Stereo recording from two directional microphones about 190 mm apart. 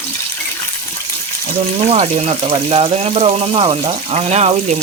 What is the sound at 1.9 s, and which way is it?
Speech, 35° right (ahead or behind).